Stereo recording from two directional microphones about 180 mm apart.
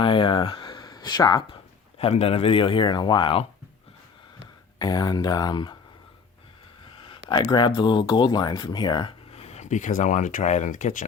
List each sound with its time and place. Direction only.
0.0 s speech: 30° left (ahead or behind)
2.0 s speech: 35° left (ahead or behind)
4.8 s speech: 20° left (ahead or behind)
7.3 s speech: 25° left (ahead or behind); by 11.0 s 45° left (ahead or behind)